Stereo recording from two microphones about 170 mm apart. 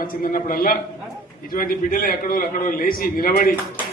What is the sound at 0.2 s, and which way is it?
A man's voice, 55° left (ahead or behind).